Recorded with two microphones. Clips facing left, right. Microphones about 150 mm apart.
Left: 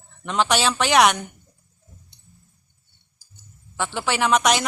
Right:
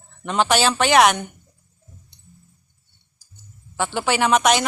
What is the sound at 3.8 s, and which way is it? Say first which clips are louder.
Speech: right 3 dB; 5° right (ahead or behind).